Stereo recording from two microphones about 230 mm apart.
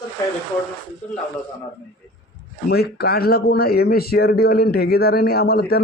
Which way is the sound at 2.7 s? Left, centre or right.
Left.